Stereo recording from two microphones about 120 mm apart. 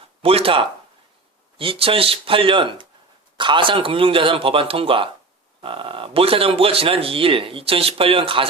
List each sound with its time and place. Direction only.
0.2 s speech: 50° right (ahead or behind)